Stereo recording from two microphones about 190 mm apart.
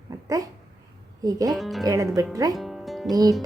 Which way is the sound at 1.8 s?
15° right (ahead or behind).